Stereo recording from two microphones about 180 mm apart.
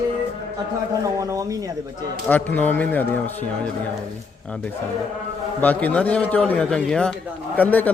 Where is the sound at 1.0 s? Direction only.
20° right (ahead or behind).